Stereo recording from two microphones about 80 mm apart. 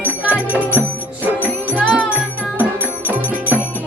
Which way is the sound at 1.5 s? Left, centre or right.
Centre.